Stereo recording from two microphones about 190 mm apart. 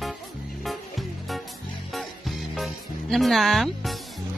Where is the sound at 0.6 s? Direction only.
Centre (ahead or behind).